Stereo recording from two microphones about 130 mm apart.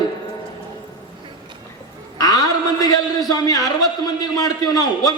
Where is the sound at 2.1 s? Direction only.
30° left (ahead or behind).